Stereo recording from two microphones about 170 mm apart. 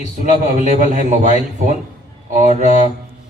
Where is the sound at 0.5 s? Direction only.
45° right (ahead or behind).